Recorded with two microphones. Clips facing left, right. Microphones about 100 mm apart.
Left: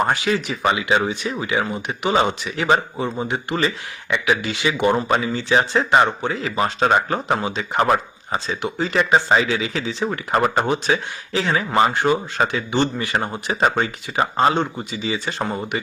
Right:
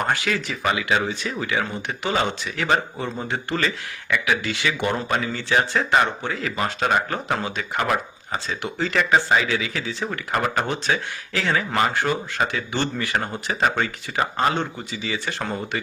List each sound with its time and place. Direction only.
0.0 s speech: 20° left (ahead or behind)